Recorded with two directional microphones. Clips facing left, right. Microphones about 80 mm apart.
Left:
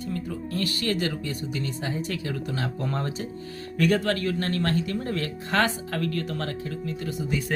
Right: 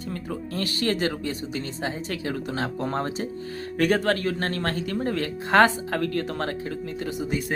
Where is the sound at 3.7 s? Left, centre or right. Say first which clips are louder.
Right 1 dB; right.